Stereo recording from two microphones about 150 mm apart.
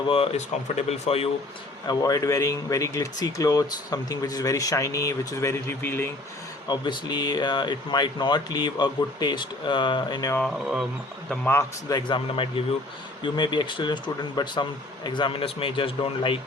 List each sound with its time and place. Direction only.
0.1 s speech: 40° left (ahead or behind)
1.9 s speech: 25° left (ahead or behind)
6.7 s speech: 30° left (ahead or behind)
10.4 s speech: centre (ahead or behind)
11.3 s speech: 15° left (ahead or behind)
11.9 s speech: 30° left (ahead or behind)